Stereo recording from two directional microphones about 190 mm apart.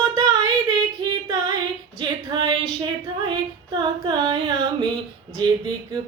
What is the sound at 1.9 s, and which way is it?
Female singing, 25° right (ahead or behind).